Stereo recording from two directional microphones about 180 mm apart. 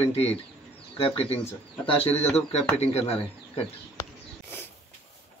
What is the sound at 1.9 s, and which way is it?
Speech, 35° left (ahead or behind).